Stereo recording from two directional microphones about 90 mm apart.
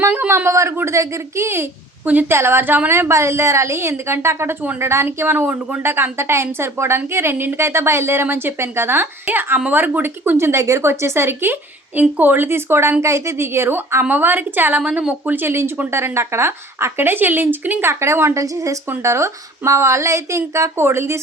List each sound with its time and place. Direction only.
0.0 s a woman's voice: 25° right (ahead or behind)